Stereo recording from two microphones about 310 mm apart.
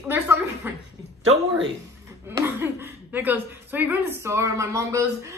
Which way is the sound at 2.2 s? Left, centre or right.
Centre.